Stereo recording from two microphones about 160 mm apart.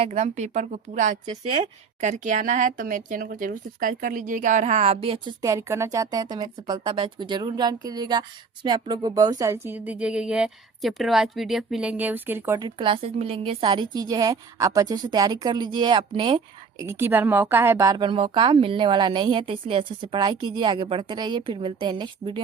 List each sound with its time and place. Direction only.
0.0 s speech: 45° right (ahead or behind); by 12.5 s 10° right (ahead or behind)
12.5 s speech: 30° right (ahead or behind)
16.8 s speech: 15° right (ahead or behind); by 22.4 s 30° right (ahead or behind)